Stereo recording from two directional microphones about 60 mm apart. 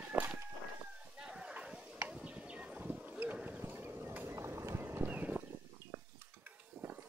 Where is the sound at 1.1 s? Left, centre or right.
Centre.